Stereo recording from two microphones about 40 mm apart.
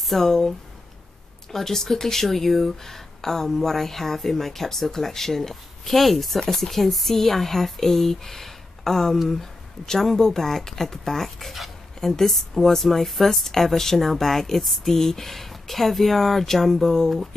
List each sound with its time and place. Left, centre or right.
0.0 s speech: centre